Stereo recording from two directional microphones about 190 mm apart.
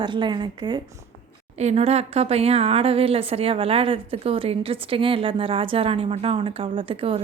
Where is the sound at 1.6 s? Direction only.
35° right (ahead or behind).